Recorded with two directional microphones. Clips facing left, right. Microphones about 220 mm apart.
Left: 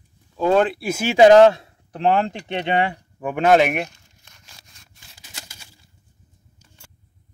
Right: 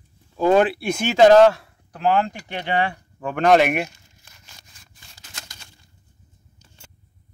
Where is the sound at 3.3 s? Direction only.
Centre (ahead or behind).